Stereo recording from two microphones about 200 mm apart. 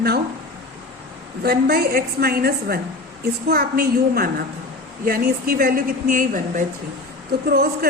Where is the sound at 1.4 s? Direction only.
50° right (ahead or behind).